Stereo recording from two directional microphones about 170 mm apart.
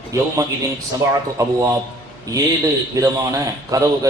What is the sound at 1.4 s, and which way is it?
Speech, 20° right (ahead or behind).